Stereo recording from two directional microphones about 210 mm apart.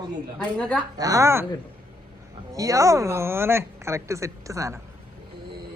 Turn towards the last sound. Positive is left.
turn(degrees=-15)  # may be behind; listen again after turning